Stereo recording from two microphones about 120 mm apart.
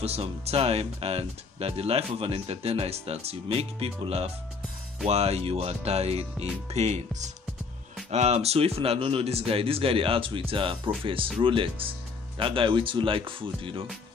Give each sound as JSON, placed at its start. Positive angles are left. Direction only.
{"t": 0.0, "sound": "speech", "side_deg": -55}